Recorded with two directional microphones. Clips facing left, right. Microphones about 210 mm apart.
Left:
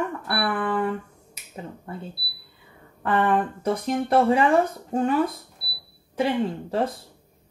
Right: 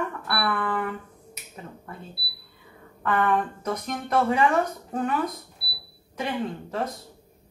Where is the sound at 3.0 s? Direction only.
30° left (ahead or behind).